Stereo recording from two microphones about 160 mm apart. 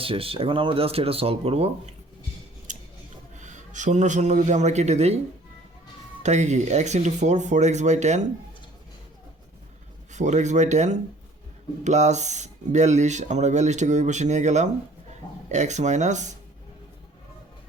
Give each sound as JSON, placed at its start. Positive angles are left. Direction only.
{"t": 0.0, "sound": "speech", "side_deg": -35}
{"t": 2.7, "sound": "scissors", "side_deg": -50}
{"t": 3.3, "sound": "a man's voice", "side_deg": -50}
{"t": 6.2, "sound": "speech", "side_deg": -45}
{"t": 10.1, "sound": "speech", "side_deg": -50}